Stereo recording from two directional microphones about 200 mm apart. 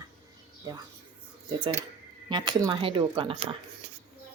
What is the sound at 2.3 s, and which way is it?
Speech, 20° right (ahead or behind).